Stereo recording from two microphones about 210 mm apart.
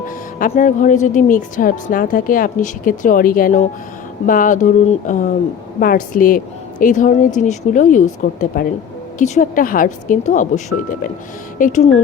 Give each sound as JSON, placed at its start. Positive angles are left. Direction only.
{"t": 0.3, "sound": "a woman's voice", "side_deg": 40}